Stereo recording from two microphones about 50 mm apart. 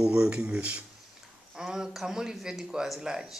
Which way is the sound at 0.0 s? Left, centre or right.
Centre.